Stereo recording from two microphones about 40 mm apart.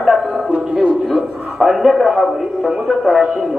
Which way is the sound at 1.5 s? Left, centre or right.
Centre.